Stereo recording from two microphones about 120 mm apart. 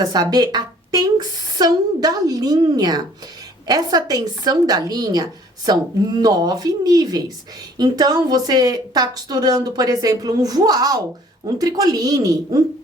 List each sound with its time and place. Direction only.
0.0 s a woman's voice: 35° right (ahead or behind)